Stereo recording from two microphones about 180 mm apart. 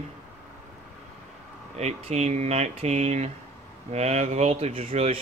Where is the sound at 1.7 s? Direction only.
35° right (ahead or behind).